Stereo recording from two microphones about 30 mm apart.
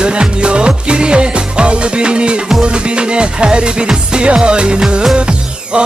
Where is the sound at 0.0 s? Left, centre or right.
Right.